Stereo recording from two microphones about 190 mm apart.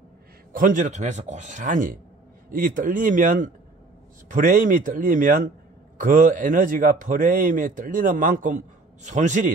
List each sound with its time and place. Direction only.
0.5 s a man's voice: 45° right (ahead or behind)